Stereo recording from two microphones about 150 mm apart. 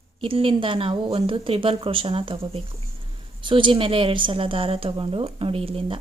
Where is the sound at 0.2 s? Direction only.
35° right (ahead or behind).